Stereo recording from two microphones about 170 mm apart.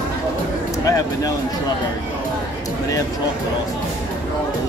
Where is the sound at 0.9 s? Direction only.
20° left (ahead or behind).